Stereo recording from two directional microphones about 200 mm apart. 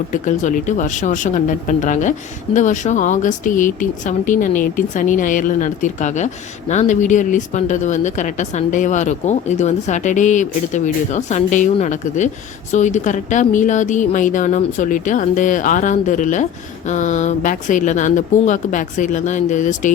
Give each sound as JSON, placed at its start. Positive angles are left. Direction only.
{"t": 0.1, "sound": "speech", "side_deg": 40}